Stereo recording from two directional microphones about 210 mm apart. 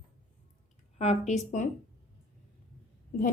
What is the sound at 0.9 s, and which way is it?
Speech, 30° left (ahead or behind).